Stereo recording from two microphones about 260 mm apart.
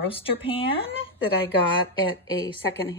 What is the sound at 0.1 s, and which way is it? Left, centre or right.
Speech, left.